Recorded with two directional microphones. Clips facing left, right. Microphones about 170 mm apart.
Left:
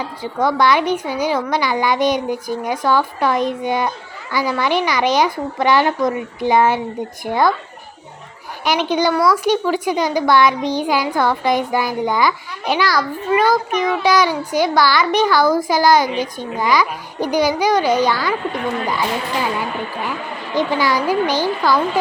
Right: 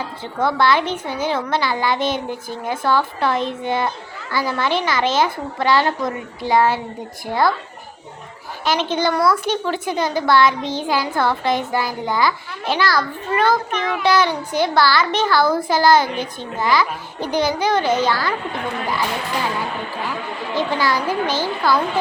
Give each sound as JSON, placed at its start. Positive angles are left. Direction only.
{"t": 0.4, "sound": "a woman's voice", "side_deg": 15}
{"t": 8.6, "sound": "a woman's voice", "side_deg": 15}
{"t": 20.6, "sound": "a woman's voice", "side_deg": 15}